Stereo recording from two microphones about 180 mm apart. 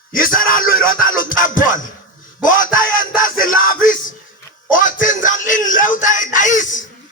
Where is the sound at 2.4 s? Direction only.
50° left (ahead or behind).